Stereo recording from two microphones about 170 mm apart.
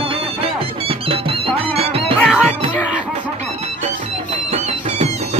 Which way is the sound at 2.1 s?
10° left (ahead or behind).